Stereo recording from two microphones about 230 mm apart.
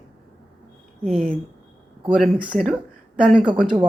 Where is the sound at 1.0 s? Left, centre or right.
Centre.